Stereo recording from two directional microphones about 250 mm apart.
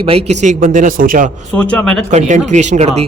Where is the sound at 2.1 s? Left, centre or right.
Right.